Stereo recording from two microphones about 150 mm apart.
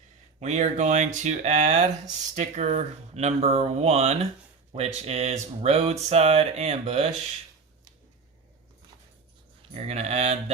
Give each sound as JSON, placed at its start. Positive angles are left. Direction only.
{"t": 0.3, "sound": "speech", "side_deg": -50}
{"t": 9.7, "sound": "speech", "side_deg": -45}